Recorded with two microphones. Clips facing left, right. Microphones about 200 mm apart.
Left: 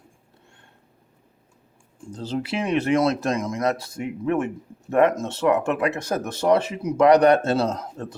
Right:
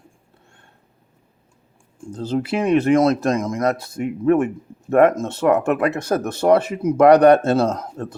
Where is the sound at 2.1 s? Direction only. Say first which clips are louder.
Right 5 dB; 50° right (ahead or behind).